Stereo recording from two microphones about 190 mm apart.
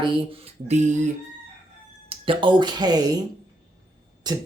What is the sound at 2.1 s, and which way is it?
Speech, 25° right (ahead or behind).